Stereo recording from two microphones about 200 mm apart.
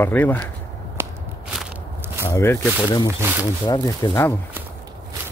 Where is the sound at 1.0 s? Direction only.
10° right (ahead or behind).